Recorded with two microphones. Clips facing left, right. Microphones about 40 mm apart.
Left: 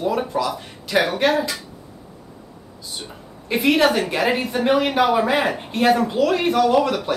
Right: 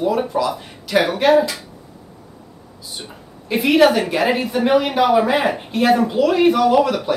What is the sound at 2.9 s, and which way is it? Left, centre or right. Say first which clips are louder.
Speech: right 1 dB; centre.